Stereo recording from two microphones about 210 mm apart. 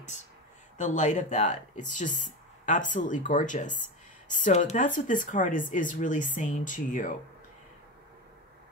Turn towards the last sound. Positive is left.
turn(degrees=40)  # may be behind; listen again after turning